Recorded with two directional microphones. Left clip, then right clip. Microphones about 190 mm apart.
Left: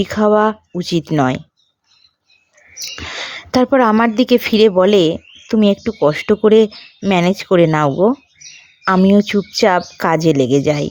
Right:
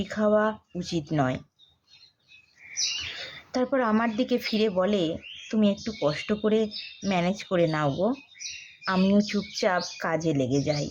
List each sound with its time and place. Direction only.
0.0 s speech: 55° left (ahead or behind)
3.2 s speech: 55° left (ahead or behind)